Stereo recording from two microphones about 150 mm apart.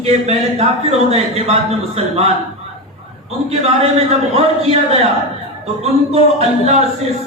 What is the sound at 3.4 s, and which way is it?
A man's voice, 45° right (ahead or behind).